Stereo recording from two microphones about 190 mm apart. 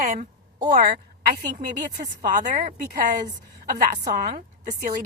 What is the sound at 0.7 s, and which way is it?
Speech, 55° right (ahead or behind).